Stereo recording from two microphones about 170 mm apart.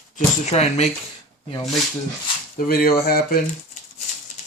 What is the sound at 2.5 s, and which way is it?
Speech, 60° left (ahead or behind).